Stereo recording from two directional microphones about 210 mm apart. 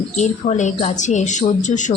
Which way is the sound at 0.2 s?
35° left (ahead or behind).